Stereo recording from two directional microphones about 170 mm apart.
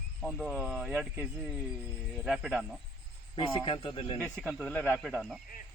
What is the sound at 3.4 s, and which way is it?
Speech, 30° left (ahead or behind).